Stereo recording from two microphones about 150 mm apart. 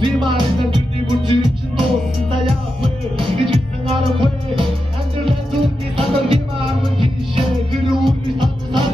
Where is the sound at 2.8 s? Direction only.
35° right (ahead or behind).